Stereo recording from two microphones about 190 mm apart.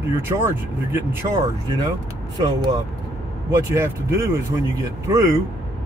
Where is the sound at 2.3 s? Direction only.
20° right (ahead or behind).